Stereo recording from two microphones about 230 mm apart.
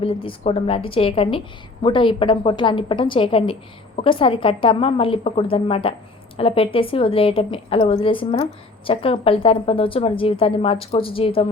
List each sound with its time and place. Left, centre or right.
0.0 s a woman's voice: left